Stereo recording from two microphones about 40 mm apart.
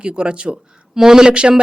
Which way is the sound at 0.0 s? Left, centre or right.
Right.